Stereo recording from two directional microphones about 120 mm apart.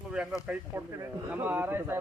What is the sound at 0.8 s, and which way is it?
A man's voice, 20° right (ahead or behind).